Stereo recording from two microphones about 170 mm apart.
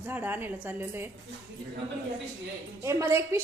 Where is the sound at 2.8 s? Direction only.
15° right (ahead or behind).